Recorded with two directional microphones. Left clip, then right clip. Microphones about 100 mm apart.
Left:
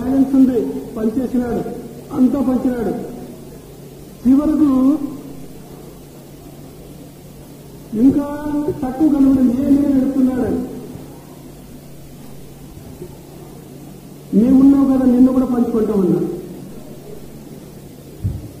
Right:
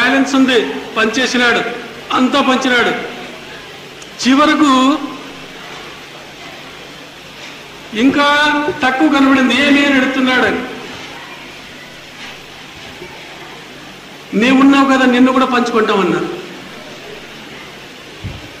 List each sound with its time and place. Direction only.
0.0 s a man's voice: 5° left (ahead or behind)
4.3 s a man's voice: 10° left (ahead or behind)
8.1 s a man's voice: 10° left (ahead or behind)
14.4 s a man's voice: 10° left (ahead or behind)